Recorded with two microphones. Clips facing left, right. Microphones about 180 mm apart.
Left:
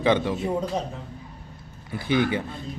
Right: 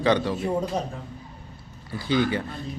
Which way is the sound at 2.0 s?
20° left (ahead or behind).